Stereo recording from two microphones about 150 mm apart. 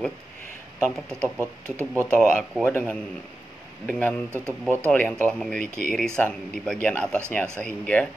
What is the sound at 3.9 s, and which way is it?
Speech, 10° left (ahead or behind).